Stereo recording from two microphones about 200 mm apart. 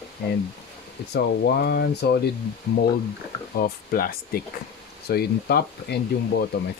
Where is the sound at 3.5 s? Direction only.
50° left (ahead or behind).